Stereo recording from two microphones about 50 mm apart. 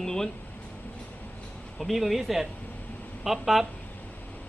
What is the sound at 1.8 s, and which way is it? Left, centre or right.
A man's voice, centre.